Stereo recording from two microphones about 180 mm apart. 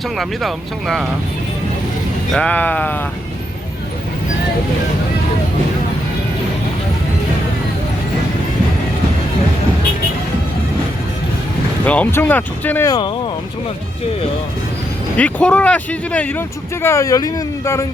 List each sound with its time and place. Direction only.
0.2 s speech: centre (ahead or behind)
2.3 s speech: 5° left (ahead or behind)
11.9 s speech: 10° left (ahead or behind)
15.1 s speech: 5° left (ahead or behind)